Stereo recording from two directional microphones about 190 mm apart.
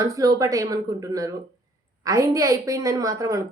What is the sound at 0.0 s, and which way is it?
Speech, 20° right (ahead or behind).